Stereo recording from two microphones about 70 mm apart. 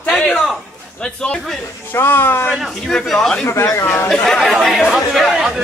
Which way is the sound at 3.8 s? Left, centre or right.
Left.